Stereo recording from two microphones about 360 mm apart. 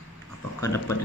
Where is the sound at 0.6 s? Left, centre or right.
Centre.